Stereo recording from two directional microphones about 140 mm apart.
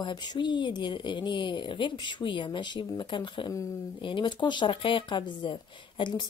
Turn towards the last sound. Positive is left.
turn(degrees=35)  # may be behind; listen again after turning